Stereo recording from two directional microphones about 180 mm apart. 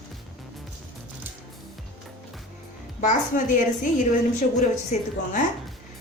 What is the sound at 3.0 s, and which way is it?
A woman's voice, 45° left (ahead or behind).